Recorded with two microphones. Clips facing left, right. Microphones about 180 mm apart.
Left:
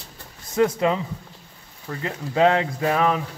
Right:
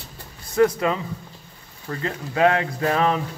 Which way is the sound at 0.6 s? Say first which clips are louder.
Right 1 dB; 20° left (ahead or behind).